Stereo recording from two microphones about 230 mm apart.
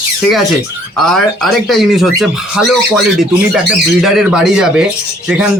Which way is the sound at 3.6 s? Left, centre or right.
Centre.